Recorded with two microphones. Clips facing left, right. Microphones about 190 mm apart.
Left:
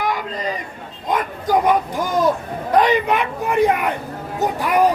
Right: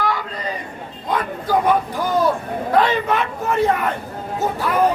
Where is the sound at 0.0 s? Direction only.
15° left (ahead or behind).